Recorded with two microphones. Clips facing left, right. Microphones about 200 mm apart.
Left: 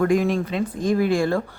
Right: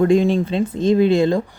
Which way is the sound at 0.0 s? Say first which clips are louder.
Right 4 dB; 25° right (ahead or behind).